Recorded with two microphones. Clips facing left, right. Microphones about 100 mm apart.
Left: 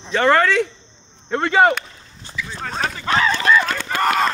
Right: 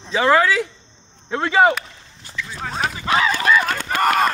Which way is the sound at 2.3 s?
5° right (ahead or behind).